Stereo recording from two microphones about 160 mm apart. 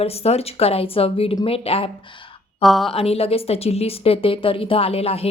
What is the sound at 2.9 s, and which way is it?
A woman's voice, 40° left (ahead or behind).